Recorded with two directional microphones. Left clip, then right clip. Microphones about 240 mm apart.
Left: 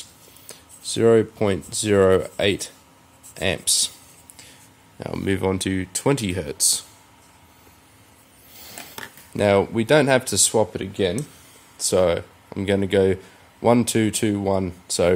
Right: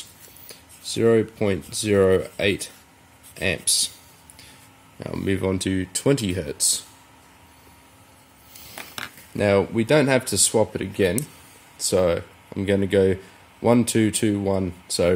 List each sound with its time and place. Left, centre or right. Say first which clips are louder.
0.5 s speech: left 2 dB; centre
9.4 s speech: left 1 dB; centre
10.7 s speech: right 1 dB; left
11.8 s speech: left 1 dB; centre